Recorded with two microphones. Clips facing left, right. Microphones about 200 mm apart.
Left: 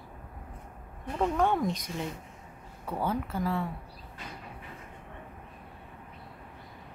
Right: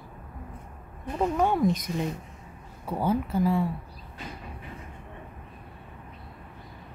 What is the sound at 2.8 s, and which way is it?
Speech, 10° right (ahead or behind).